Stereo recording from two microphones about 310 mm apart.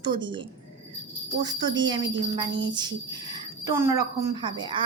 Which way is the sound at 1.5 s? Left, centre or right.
Centre.